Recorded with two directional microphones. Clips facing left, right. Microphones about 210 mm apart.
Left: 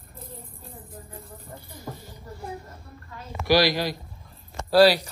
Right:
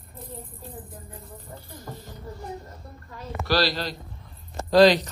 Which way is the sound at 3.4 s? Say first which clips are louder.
Left 4 dB; 15° left (ahead or behind).